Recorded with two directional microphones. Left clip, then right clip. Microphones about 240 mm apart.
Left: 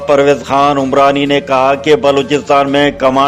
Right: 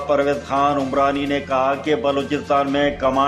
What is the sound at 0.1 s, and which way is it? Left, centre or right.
Speech, left.